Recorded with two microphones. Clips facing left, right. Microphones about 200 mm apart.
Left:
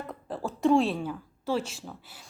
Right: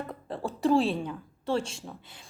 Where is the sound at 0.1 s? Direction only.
Centre (ahead or behind).